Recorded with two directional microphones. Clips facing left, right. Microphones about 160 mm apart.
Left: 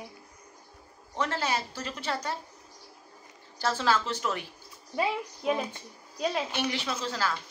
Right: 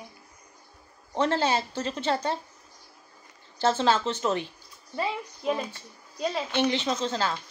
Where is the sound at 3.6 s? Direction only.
25° right (ahead or behind).